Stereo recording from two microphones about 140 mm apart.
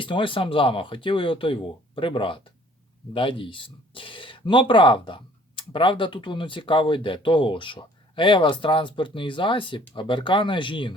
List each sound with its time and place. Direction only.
0.0 s speech: 35° left (ahead or behind)